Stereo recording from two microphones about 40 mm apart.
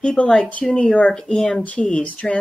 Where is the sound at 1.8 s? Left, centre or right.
Left.